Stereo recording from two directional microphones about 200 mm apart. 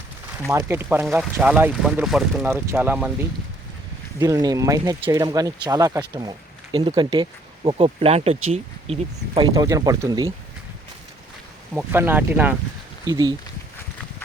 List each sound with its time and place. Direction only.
0.4 s speech: 10° right (ahead or behind)
11.7 s speech: 5° right (ahead or behind)
13.1 s speech: 20° right (ahead or behind)